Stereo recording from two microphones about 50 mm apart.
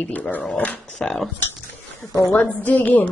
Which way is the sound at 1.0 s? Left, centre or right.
Centre.